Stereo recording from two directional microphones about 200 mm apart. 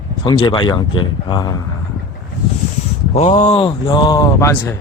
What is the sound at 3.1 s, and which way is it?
Speech, 30° left (ahead or behind).